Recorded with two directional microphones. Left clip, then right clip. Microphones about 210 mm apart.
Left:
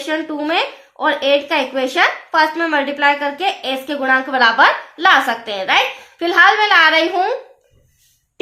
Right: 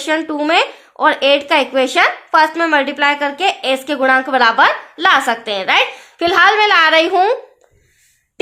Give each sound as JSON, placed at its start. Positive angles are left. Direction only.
{"t": 0.0, "sound": "a woman's voice", "side_deg": -40}